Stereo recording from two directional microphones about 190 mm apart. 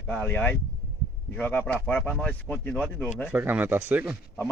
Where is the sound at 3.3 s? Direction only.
10° right (ahead or behind).